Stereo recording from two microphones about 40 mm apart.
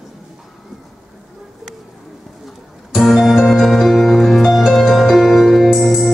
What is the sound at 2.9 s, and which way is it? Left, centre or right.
Music, centre.